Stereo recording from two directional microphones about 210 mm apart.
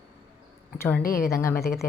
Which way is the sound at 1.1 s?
15° left (ahead or behind).